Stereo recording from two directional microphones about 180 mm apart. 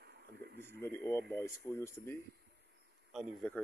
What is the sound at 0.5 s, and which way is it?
Speech, 15° left (ahead or behind).